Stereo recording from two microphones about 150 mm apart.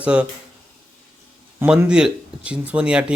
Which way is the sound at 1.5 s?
10° right (ahead or behind).